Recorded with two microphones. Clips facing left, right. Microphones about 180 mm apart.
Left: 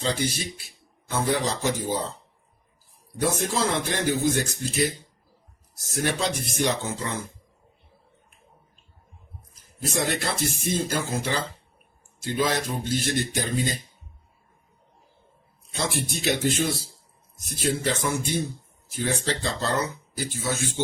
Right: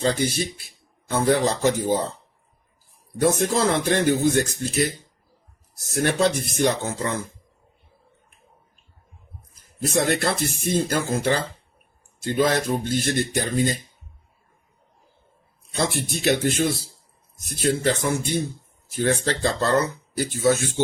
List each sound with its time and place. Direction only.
0.0 s speech: 50° right (ahead or behind)
3.2 s speech: 55° right (ahead or behind)
5.7 s speech: 55° right (ahead or behind)
9.8 s speech: 55° right (ahead or behind)
16.2 s speech: 55° right (ahead or behind)